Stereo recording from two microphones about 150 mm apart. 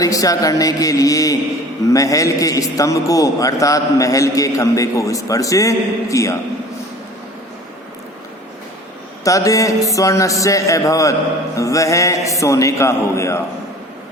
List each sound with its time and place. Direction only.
0.0 s a man's voice: 25° left (ahead or behind)
9.2 s a man's voice: 20° left (ahead or behind)